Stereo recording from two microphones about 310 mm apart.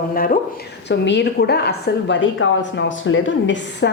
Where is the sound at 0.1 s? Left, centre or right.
Left.